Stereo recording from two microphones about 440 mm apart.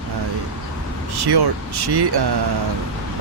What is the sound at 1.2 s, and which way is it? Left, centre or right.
Speech, right.